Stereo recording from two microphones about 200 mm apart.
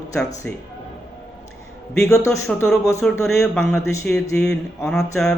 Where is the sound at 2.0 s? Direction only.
15° left (ahead or behind).